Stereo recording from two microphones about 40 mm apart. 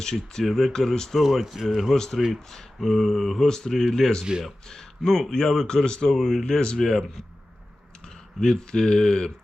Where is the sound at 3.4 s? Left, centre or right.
Centre.